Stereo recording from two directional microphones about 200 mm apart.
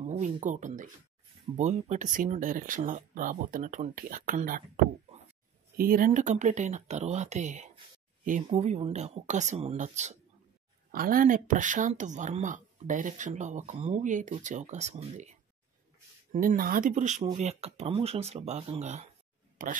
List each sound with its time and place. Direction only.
0.0 s speech: 35° right (ahead or behind)
5.8 s speech: 45° right (ahead or behind)
16.3 s speech: 45° right (ahead or behind)